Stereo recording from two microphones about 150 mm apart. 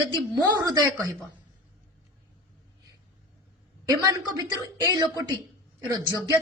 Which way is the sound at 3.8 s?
25° right (ahead or behind).